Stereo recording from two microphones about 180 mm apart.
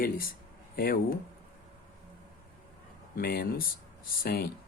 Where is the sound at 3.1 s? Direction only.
55° left (ahead or behind).